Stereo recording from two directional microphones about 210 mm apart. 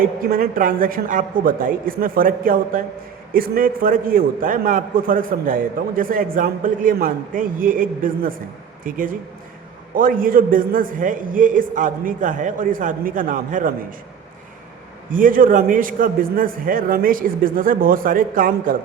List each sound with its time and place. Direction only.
0.0 s a man's voice: 40° right (ahead or behind)
15.1 s a man's voice: 40° right (ahead or behind)